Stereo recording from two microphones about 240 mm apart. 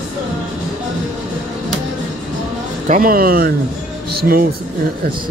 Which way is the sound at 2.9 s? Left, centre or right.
Right.